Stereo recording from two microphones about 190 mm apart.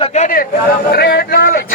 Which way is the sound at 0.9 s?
55° left (ahead or behind).